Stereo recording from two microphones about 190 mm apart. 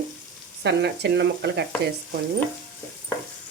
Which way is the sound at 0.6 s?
65° right (ahead or behind).